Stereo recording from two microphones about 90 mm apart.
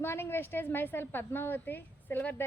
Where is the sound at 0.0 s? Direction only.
25° left (ahead or behind).